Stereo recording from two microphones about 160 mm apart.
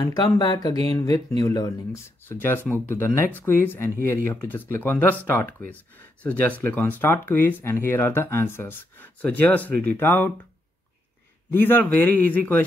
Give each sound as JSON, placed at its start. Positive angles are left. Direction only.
{"t": 0.0, "sound": "speech", "side_deg": 25}
{"t": 11.5, "sound": "speech", "side_deg": 10}